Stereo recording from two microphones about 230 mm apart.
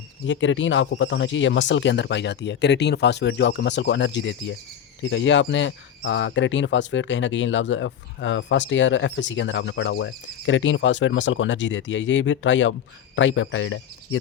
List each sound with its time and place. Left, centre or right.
0.3 s speech: left